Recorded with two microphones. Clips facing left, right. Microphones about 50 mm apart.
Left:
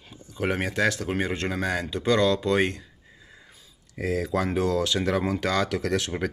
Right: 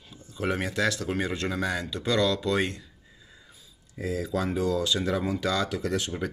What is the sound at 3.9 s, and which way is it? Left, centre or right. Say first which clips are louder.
Speech: left 3 dB; left.